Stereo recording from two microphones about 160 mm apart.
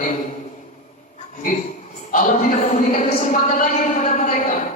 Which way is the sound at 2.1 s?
50° left (ahead or behind).